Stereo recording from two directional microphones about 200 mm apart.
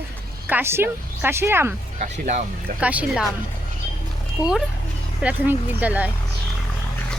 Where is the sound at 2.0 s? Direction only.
35° right (ahead or behind).